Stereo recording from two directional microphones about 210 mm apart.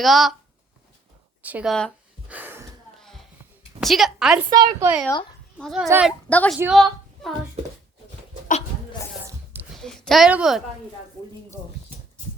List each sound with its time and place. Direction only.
0.0 s a woman's voice: centre (ahead or behind)
1.4 s a woman's voice: 5° right (ahead or behind)
2.3 s gasp: 10° right (ahead or behind)
3.0 s a sound: centre (ahead or behind)
3.8 s a woman's voice: centre (ahead or behind)
4.4 s a woman's voice: 20° right (ahead or behind)
5.5 s a woman's voice: centre (ahead or behind)
6.2 s a woman's voice: 5° left (ahead or behind)
9.7 s a woman's voice: centre (ahead or behind)